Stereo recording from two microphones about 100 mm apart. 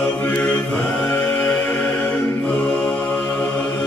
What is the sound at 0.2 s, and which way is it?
Mantra, 15° left (ahead or behind).